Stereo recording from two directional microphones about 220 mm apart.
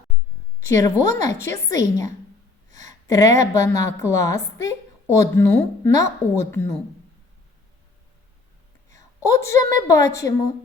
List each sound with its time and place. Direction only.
0.6 s a woman's voice: 15° left (ahead or behind)
2.7 s a sound: 15° left (ahead or behind)
3.4 s a woman's voice: 15° left (ahead or behind)
8.9 s a woman's voice: 15° left (ahead or behind)